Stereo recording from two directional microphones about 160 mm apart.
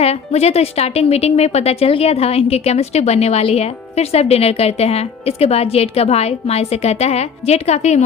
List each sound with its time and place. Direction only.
0.0 s a woman's voice: 40° left (ahead or behind)